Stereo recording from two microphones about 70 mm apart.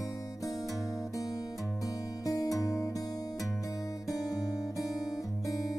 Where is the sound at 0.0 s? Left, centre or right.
Left.